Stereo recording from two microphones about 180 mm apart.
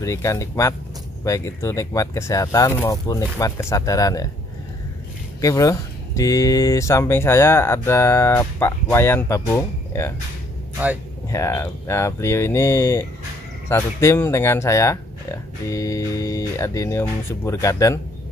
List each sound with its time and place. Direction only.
0.0 s speech: 15° left (ahead or behind)
5.4 s speech: 20° left (ahead or behind)
11.2 s speech: 15° left (ahead or behind)